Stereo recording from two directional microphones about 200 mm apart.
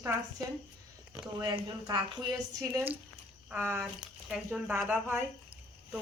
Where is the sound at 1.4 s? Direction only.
20° right (ahead or behind); by 5.2 s 5° right (ahead or behind).